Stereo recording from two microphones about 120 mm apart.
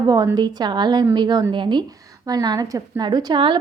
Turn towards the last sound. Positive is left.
turn(degrees=-40)  # may be behind; listen again after turning